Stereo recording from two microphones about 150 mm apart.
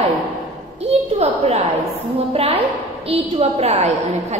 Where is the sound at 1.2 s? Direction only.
45° right (ahead or behind).